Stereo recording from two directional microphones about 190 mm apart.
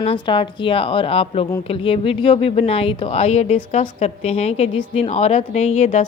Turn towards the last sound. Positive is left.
turn(degrees=35)  # may be behind; listen again after turning